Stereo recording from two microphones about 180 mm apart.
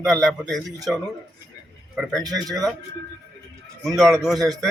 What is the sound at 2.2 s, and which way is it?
Speech, 20° right (ahead or behind).